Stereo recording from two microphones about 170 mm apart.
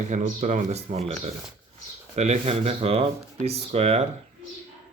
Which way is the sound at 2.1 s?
40° right (ahead or behind).